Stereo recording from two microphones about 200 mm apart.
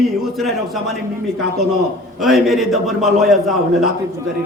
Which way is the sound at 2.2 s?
Centre (ahead or behind).